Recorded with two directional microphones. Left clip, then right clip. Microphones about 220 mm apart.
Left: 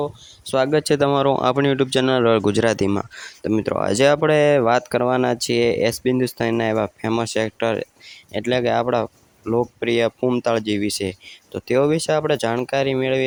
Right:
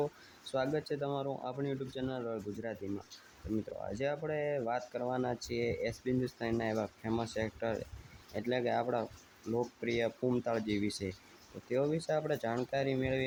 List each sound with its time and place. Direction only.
0.5 s speech: 45° left (ahead or behind)